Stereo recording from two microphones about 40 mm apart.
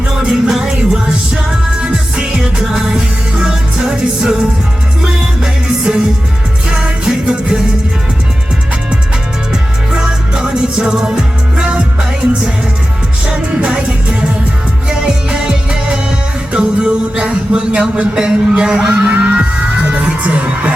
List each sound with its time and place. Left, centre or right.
0.1 s music: centre
9.9 s music: centre
13.7 s music: right
19.1 s music: right